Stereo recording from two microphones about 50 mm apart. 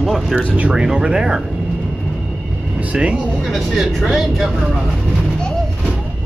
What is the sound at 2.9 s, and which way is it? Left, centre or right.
Speech, right.